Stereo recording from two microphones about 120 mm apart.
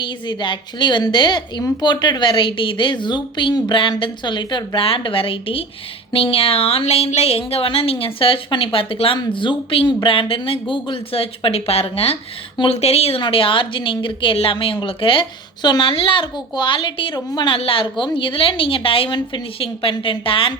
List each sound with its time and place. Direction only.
0.0 s a woman's voice: 40° left (ahead or behind)